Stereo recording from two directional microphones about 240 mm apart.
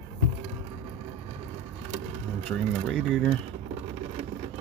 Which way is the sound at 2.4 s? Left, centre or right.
Centre.